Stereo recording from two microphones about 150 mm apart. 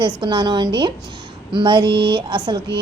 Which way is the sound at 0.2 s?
30° right (ahead or behind).